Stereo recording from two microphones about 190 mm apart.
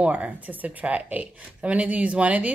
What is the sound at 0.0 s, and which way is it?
A woman's voice, 5° right (ahead or behind).